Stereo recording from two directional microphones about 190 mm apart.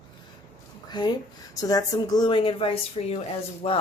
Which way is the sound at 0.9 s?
20° left (ahead or behind).